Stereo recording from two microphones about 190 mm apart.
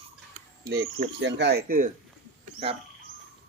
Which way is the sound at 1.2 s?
65° right (ahead or behind).